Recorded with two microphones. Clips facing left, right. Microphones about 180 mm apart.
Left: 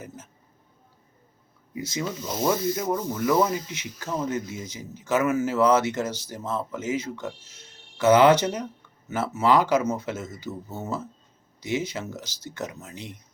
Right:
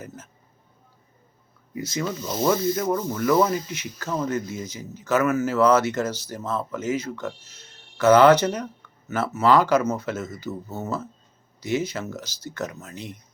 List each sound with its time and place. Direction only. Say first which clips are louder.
1.7 s speech: right 2 dB; 20° left (ahead or behind)